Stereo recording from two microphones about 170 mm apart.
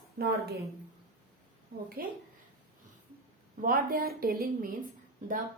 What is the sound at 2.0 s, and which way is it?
Speech, 60° right (ahead or behind).